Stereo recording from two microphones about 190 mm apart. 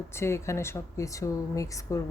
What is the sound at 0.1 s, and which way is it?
Speech, 15° left (ahead or behind).